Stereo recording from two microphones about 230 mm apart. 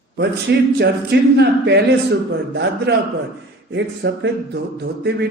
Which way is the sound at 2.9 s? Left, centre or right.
Right.